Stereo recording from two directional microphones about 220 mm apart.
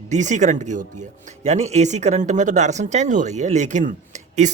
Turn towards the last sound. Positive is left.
turn(degrees=-35)  # may be behind; listen again after turning